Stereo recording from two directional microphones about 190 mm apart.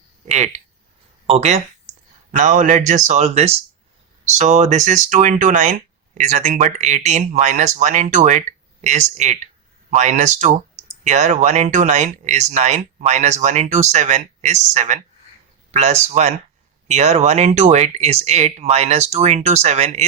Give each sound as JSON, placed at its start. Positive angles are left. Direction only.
{"t": 0.3, "sound": "speech", "side_deg": -35}